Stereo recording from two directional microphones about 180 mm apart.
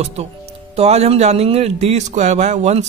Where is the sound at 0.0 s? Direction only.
35° right (ahead or behind).